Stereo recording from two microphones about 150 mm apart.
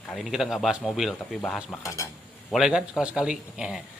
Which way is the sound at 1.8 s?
20° left (ahead or behind).